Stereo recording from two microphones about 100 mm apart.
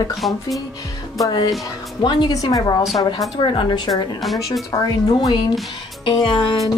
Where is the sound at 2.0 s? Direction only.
45° left (ahead or behind).